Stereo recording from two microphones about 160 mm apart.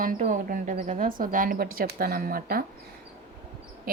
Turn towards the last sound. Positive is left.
turn(degrees=-65)  # may be behind; listen again after turning